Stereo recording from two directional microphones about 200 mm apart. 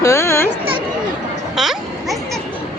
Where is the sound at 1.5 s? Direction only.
Centre (ahead or behind).